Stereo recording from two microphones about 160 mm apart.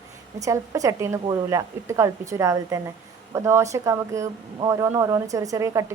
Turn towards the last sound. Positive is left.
turn(degrees=-20)  # may be behind; listen again after turning